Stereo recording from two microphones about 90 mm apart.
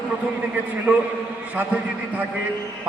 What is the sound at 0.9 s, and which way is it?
A man's voice, 5° right (ahead or behind).